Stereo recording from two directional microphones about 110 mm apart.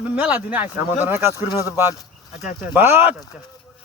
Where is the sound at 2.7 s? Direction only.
20° right (ahead or behind).